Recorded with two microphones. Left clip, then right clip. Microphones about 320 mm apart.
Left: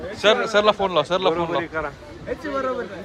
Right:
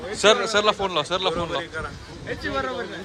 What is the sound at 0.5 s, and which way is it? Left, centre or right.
A man's voice, centre.